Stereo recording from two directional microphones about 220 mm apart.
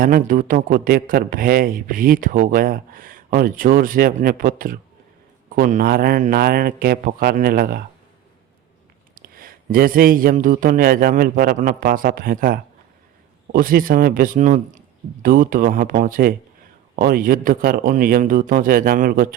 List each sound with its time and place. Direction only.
0.0 s speech: 40° right (ahead or behind)
9.1 s speech: 40° right (ahead or behind)